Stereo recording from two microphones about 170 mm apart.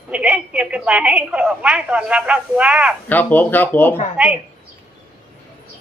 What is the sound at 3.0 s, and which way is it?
Speech, 10° left (ahead or behind).